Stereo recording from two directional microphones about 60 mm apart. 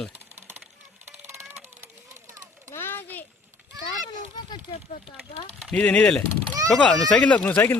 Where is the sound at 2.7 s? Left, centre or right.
Left.